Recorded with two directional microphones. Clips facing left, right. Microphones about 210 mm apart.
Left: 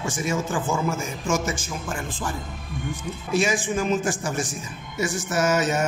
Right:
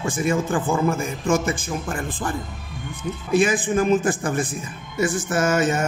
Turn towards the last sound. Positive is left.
turn(degrees=-50)  # may be behind; listen again after turning